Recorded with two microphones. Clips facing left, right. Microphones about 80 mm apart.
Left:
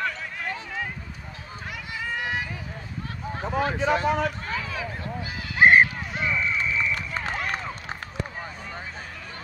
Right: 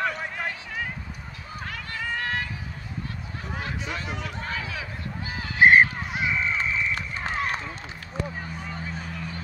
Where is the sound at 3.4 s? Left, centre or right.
Left.